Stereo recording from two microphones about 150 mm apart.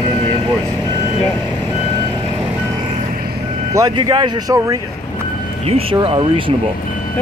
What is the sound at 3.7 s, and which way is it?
Speech, 25° right (ahead or behind).